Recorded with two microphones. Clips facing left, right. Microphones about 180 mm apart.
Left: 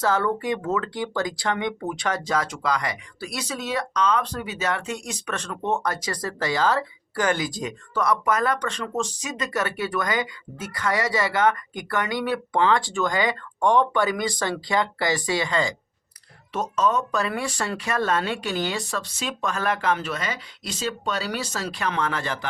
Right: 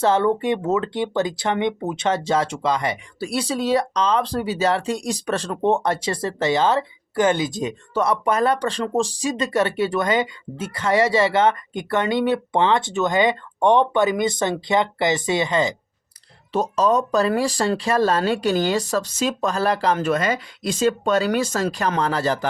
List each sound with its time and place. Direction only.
0.0 s speech: 25° right (ahead or behind)
16.5 s speech: 30° right (ahead or behind)